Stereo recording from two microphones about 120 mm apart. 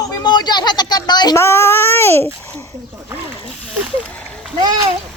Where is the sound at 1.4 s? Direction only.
20° left (ahead or behind).